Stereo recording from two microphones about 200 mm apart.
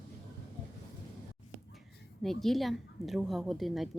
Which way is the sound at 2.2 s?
Centre (ahead or behind).